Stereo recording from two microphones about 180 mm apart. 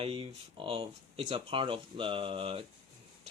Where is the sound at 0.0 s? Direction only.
30° right (ahead or behind).